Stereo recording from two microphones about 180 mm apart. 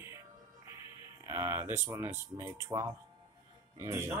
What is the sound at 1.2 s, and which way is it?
Speech, 15° right (ahead or behind).